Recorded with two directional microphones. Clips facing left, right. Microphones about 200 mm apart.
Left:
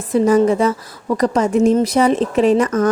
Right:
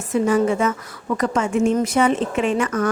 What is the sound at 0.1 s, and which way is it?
A woman's voice, 40° left (ahead or behind).